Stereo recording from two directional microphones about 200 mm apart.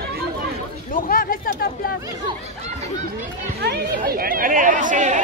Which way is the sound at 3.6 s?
50° right (ahead or behind).